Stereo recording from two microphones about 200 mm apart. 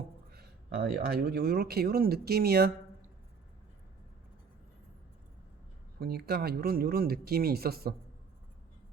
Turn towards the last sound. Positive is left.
turn(degrees=-50)  # may be behind; listen again after turning